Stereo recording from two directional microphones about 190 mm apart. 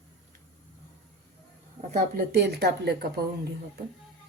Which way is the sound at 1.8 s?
45° right (ahead or behind).